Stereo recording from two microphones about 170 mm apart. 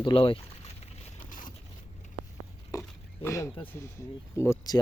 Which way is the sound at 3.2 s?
15° left (ahead or behind).